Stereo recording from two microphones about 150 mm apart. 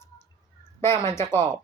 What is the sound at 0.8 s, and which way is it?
Speech, 20° left (ahead or behind).